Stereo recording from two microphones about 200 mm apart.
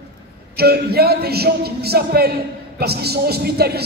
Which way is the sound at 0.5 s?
50° right (ahead or behind).